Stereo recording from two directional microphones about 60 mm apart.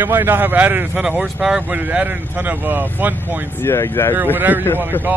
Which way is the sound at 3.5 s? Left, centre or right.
Left.